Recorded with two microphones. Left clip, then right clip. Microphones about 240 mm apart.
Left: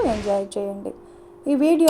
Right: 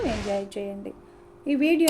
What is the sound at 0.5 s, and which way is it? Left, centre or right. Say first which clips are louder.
A woman's voice: left 6 dB; left.